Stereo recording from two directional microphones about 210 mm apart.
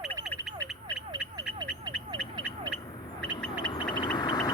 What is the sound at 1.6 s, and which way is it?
Frog, 20° right (ahead or behind).